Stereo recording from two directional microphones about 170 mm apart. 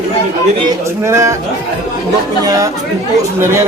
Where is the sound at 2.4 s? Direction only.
20° right (ahead or behind).